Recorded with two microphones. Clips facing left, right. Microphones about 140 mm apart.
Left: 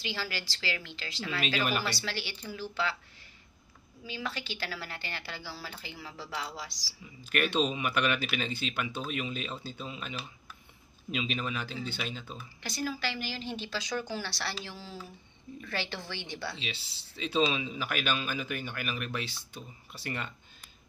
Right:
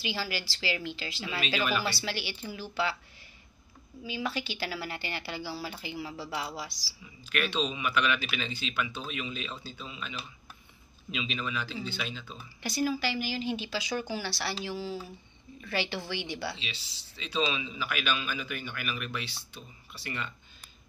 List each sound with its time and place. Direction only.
0.0 s speech: 10° right (ahead or behind)
4.0 s speech: 10° right (ahead or behind)
7.2 s speech: 50° left (ahead or behind)
12.6 s speech: 10° right (ahead or behind)
17.7 s speech: 45° left (ahead or behind)